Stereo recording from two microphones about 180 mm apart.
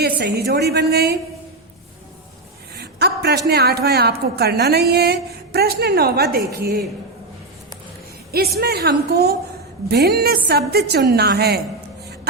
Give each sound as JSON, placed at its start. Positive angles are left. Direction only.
{"t": 0.2, "sound": "a woman's voice", "side_deg": -70}
{"t": 2.7, "sound": "a woman's voice", "side_deg": -65}
{"t": 8.3, "sound": "a woman's voice", "side_deg": -60}